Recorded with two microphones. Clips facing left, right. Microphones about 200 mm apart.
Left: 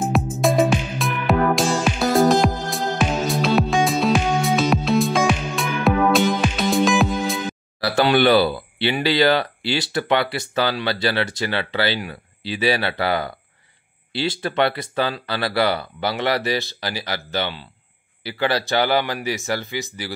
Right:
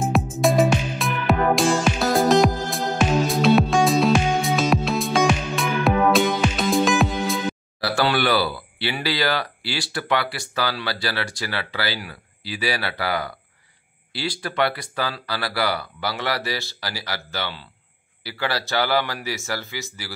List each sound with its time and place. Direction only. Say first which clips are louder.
0.0 s music: even; centre (ahead or behind)
7.9 s speech: left 5 dB; 20° left (ahead or behind)